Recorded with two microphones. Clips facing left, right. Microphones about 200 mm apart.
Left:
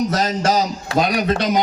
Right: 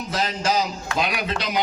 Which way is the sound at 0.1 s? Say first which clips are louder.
Left 5 dB; 40° left (ahead or behind).